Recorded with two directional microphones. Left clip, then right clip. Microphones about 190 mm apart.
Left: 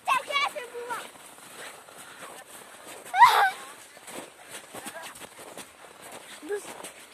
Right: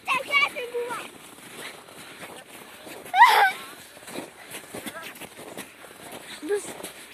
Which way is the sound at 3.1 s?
10° left (ahead or behind).